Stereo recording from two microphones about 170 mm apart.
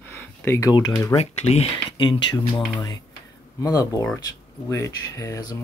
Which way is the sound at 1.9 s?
25° left (ahead or behind).